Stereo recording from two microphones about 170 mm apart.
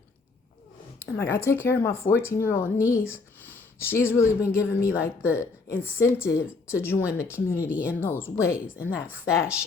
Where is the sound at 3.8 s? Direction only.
15° left (ahead or behind).